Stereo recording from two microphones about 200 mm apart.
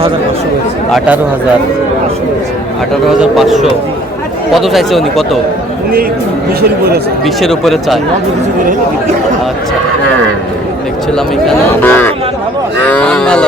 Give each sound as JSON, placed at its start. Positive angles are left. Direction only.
{"t": 0.9, "sound": "speech", "side_deg": -5}
{"t": 2.9, "sound": "speech", "side_deg": 0}
{"t": 6.6, "sound": "speech", "side_deg": -50}
{"t": 7.3, "sound": "speech", "side_deg": 0}
{"t": 11.4, "sound": "speech", "side_deg": 10}